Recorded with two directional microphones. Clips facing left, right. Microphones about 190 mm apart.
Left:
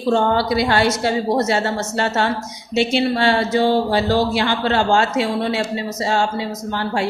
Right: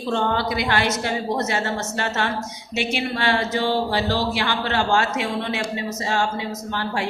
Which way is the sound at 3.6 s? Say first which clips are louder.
Left 5 dB; 50° left (ahead or behind).